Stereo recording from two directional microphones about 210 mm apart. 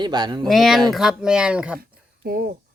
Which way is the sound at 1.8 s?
45° right (ahead or behind).